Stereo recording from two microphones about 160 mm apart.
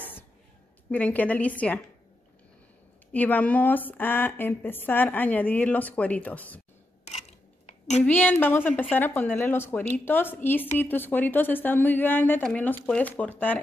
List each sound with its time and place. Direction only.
0.8 s a woman's voice: 10° left (ahead or behind)
3.1 s a woman's voice: 10° left (ahead or behind)
7.6 s a sound: 45° left (ahead or behind)
8.0 s a woman's voice: 10° left (ahead or behind)